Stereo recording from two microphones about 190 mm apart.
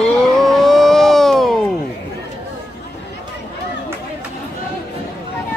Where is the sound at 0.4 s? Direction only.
Centre (ahead or behind).